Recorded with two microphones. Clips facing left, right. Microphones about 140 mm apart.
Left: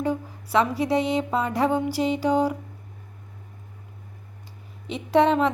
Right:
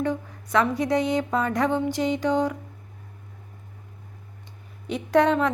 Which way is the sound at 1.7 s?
5° left (ahead or behind).